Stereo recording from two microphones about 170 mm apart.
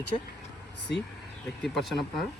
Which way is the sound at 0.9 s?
90° left.